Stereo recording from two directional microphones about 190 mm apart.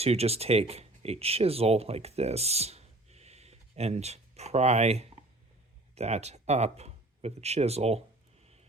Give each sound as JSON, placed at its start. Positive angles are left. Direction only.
{"t": 0.0, "sound": "speech", "side_deg": -35}